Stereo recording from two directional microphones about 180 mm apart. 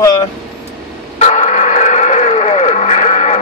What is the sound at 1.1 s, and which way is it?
Radio, 40° left (ahead or behind).